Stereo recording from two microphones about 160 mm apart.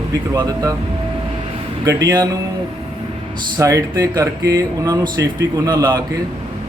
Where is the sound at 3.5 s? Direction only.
20° right (ahead or behind).